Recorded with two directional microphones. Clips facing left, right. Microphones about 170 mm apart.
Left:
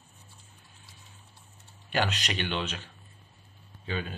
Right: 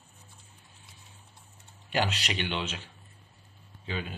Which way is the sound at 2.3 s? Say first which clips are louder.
Left 1 dB; 20° right (ahead or behind).